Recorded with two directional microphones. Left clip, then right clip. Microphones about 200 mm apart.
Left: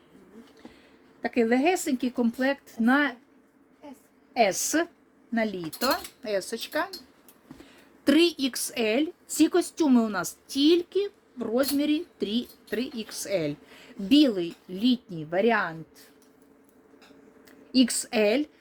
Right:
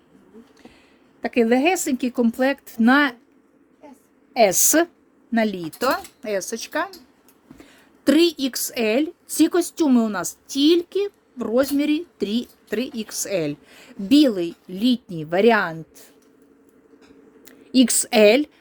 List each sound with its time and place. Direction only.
1.2 s a woman's voice: 35° right (ahead or behind); by 3.2 s 55° right (ahead or behind)
4.4 s a woman's voice: 60° right (ahead or behind)
5.3 s a woman's voice: 45° right (ahead or behind)
17.4 s a woman's voice: 55° right (ahead or behind)